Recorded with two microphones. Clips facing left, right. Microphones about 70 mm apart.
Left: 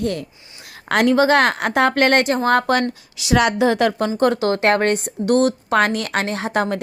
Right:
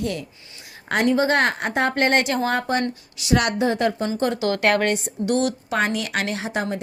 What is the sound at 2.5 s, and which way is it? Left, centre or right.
Speech, left.